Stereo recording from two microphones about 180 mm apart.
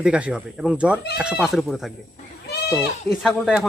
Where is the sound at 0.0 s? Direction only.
5° right (ahead or behind).